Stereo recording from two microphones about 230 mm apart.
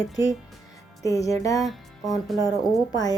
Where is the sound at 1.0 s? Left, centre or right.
Centre.